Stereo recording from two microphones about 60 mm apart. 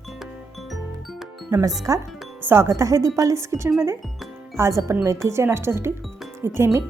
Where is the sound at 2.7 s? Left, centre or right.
Right.